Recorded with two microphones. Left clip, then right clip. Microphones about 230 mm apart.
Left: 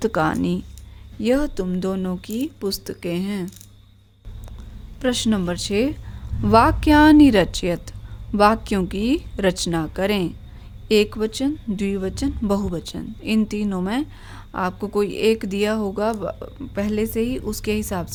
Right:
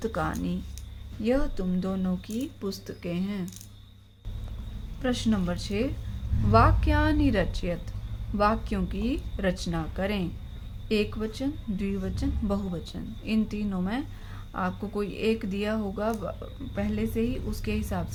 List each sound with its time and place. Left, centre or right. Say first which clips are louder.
0.0 s a woman's voice: left 10 dB; left
5.0 s a woman's voice: left 7 dB; left